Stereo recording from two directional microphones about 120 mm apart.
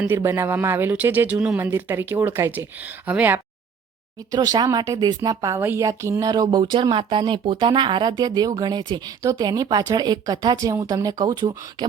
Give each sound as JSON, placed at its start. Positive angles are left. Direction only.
{"t": 0.0, "sound": "speech", "side_deg": -20}
{"t": 4.3, "sound": "speech", "side_deg": -30}